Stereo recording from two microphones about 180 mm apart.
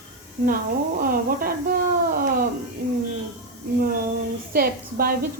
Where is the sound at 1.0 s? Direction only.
55° right (ahead or behind).